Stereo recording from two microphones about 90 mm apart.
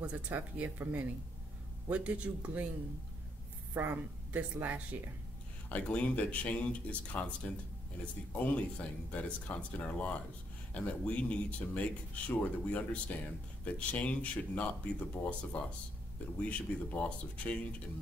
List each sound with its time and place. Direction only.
0.0 s a man's voice: 15° right (ahead or behind)
3.7 s speech: 20° right (ahead or behind)
5.7 s speech: 15° left (ahead or behind)